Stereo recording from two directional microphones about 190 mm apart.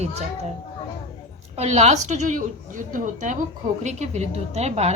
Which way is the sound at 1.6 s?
35° right (ahead or behind).